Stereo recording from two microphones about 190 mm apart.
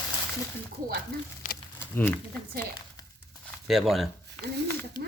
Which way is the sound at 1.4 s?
45° left (ahead or behind).